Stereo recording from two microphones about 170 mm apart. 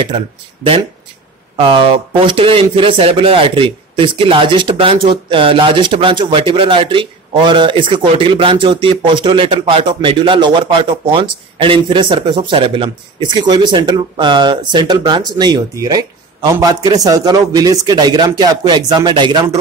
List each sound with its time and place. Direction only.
1.6 s speech: 30° right (ahead or behind)